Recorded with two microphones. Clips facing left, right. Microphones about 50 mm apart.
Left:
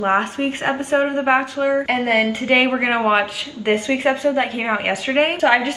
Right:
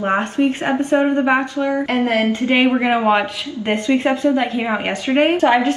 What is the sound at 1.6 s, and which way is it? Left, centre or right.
Speech, left.